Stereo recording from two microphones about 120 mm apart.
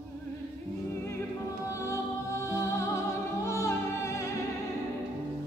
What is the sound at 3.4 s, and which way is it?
Music, 25° left (ahead or behind).